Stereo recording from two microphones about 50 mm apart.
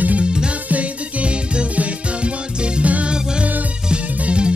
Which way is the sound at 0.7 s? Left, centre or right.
Right.